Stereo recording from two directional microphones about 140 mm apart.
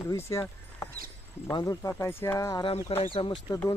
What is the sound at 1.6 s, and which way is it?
Speech, 25° left (ahead or behind).